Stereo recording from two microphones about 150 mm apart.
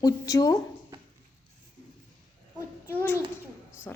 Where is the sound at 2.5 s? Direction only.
15° left (ahead or behind).